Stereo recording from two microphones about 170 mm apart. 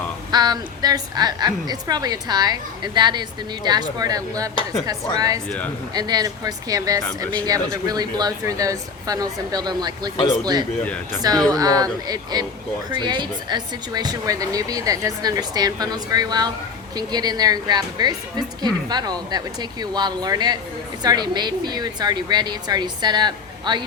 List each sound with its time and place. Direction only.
0.3 s speech: 25° right (ahead or behind)